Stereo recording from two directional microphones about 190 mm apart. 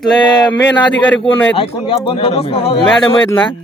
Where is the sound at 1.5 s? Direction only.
30° left (ahead or behind).